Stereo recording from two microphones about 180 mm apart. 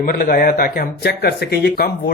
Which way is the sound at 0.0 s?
50° left (ahead or behind).